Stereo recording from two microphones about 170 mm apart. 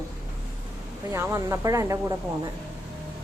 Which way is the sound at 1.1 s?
15° right (ahead or behind).